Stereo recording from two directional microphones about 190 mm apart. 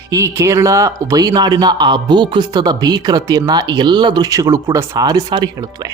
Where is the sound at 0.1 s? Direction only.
15° right (ahead or behind).